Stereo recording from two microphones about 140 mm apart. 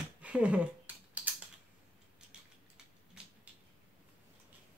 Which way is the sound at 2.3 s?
5° right (ahead or behind).